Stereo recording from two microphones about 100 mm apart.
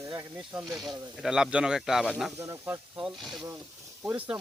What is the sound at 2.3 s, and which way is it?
Speech, 25° right (ahead or behind).